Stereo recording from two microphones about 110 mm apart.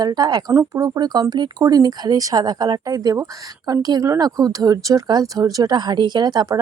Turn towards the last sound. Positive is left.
turn(degrees=-35)  # may be behind; listen again after turning